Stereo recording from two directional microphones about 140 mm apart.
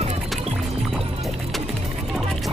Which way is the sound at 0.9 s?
Centre (ahead or behind).